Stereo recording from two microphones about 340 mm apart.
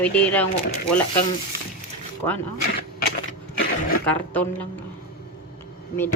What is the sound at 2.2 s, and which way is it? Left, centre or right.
Speech, centre.